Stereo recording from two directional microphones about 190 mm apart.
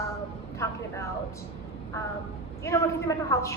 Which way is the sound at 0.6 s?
15° left (ahead or behind).